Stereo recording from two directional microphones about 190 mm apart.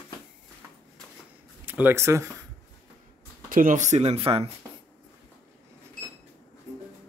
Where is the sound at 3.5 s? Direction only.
45° right (ahead or behind); by 4.4 s 30° right (ahead or behind).